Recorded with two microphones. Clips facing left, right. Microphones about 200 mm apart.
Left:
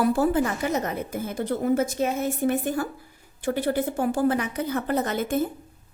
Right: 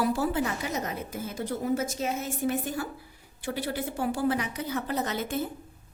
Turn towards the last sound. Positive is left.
turn(degrees=50)  # may be behind; listen again after turning